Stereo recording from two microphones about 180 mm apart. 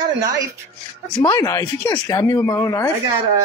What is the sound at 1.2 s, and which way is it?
Speech, 20° left (ahead or behind).